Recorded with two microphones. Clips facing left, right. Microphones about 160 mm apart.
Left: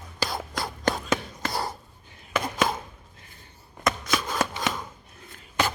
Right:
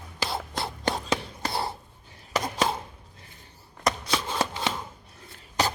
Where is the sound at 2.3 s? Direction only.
35° right (ahead or behind).